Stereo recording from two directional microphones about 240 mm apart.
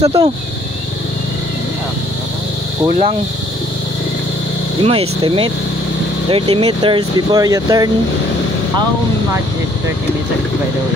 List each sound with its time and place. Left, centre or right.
0.0 s speech: right
4.8 s speech: right